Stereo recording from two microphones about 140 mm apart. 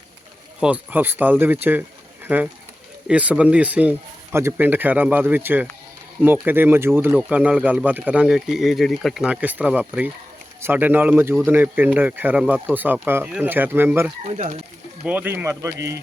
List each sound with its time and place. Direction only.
0.6 s speech: 10° right (ahead or behind)
14.3 s speech: 50° right (ahead or behind)
15.0 s speech: 10° right (ahead or behind)